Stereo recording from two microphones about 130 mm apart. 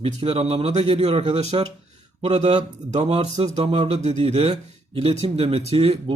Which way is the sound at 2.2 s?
55° right (ahead or behind).